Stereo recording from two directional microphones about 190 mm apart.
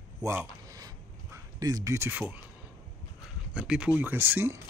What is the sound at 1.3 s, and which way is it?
Speech, 20° right (ahead or behind).